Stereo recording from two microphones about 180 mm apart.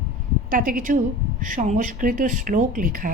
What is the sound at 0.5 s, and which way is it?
Speech, 50° right (ahead or behind).